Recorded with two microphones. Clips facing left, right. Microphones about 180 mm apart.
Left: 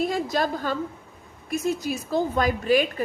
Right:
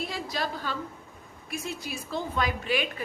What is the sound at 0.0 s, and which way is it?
A woman's voice, 45° left (ahead or behind).